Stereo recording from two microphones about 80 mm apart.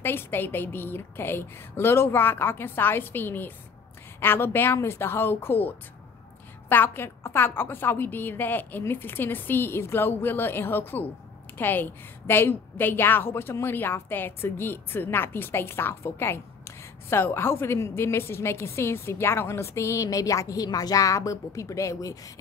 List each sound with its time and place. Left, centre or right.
0.0 s a woman's voice: left